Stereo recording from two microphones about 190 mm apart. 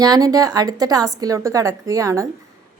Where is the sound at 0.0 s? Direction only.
20° right (ahead or behind).